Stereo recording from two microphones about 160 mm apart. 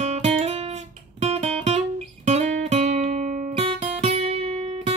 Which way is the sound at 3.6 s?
40° right (ahead or behind).